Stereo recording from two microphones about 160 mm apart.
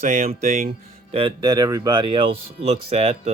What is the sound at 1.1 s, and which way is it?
Speech, 35° right (ahead or behind).